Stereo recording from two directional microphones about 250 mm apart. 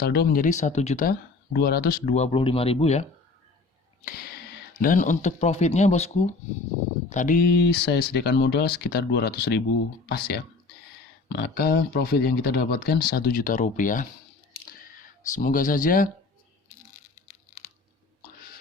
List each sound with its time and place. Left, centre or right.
0.0 s speech: left
4.0 s a sound: left
4.8 s speech: left
15.3 s speech: left